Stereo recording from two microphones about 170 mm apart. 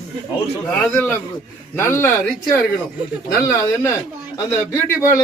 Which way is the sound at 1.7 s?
15° left (ahead or behind).